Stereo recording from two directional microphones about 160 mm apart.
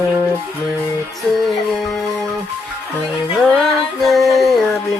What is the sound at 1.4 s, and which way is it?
Music, centre (ahead or behind).